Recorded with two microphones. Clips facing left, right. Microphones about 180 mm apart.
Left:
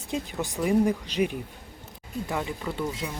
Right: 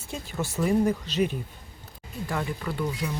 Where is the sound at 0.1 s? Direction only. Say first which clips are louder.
Left 2 dB; 15° left (ahead or behind).